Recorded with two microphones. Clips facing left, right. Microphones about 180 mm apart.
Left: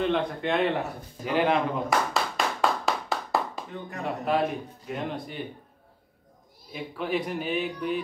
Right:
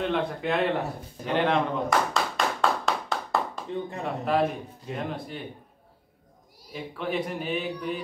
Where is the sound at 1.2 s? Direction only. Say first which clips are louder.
Even; 5° left (ahead or behind).